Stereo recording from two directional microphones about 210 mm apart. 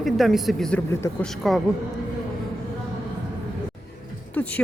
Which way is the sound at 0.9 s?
10° left (ahead or behind).